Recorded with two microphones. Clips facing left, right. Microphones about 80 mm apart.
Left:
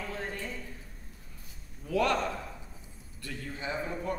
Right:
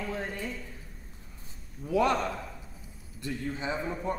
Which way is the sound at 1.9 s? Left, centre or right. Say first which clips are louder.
Right 2 dB; centre.